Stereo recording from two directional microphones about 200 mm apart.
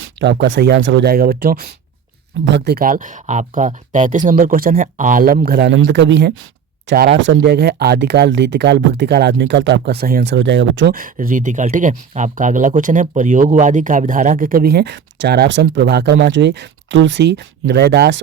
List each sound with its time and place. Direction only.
0.2 s speech: 65° right (ahead or behind)
1.1 s speech: 50° right (ahead or behind)
2.4 s speech: 60° right (ahead or behind)
10.3 s speech: 65° right (ahead or behind)
10.9 s speech: 45° right (ahead or behind)